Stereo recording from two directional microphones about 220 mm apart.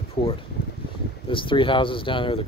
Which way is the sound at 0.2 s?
20° left (ahead or behind).